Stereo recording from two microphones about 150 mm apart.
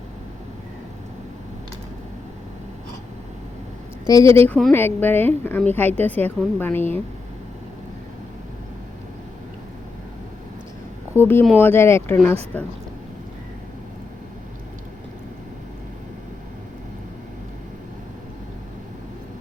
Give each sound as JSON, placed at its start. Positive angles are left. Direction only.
{"t": 4.0, "sound": "speech", "side_deg": 20}
{"t": 4.4, "sound": "a woman's voice", "side_deg": 10}
{"t": 11.1, "sound": "a woman's voice", "side_deg": 15}